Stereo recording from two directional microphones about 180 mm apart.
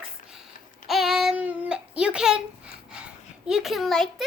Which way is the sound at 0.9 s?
Centre (ahead or behind).